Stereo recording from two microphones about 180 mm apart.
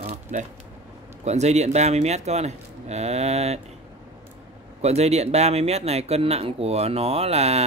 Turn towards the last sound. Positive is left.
turn(degrees=-35)  # may be behind; listen again after turning